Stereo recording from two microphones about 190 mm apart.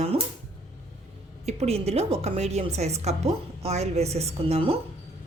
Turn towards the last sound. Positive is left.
turn(degrees=-30)  # may be behind; listen again after turning